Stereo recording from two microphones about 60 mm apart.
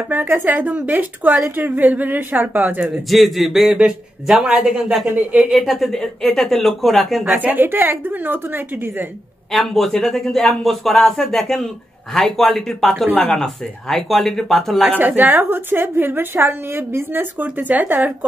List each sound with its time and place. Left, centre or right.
0.1 s a woman's voice: right
3.1 s speech: centre
5.1 s a woman's voice: right
5.5 s speech: centre
7.3 s a woman's voice: right
9.5 s speech: centre
14.9 s a woman's voice: right